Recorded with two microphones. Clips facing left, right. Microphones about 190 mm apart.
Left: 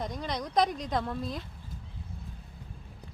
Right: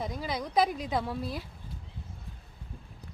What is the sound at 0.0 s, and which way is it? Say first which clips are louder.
Speech: even; 5° right (ahead or behind).